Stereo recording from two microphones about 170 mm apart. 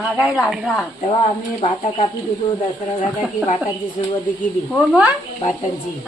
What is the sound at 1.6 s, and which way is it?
Speech, 35° left (ahead or behind).